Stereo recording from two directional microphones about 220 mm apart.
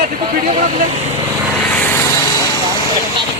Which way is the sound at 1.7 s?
10° left (ahead or behind).